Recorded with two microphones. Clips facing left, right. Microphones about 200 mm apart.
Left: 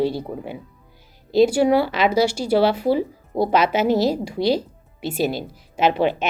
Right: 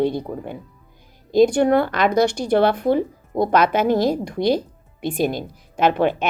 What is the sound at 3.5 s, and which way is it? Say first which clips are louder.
Speech: right 1 dB; 50° right (ahead or behind).